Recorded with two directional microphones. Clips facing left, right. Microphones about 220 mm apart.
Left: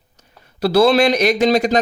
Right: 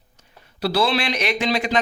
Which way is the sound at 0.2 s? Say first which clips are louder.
Left 5 dB; 45° left (ahead or behind).